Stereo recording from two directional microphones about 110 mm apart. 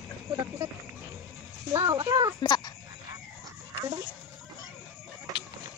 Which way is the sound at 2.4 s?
40° left (ahead or behind).